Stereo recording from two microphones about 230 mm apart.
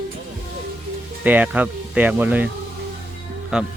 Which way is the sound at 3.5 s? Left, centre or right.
Centre.